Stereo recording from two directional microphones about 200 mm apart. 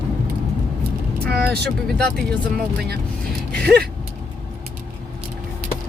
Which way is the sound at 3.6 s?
50° right (ahead or behind).